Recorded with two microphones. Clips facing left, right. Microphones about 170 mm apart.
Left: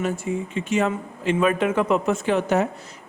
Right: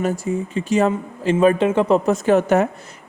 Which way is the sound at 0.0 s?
40° right (ahead or behind).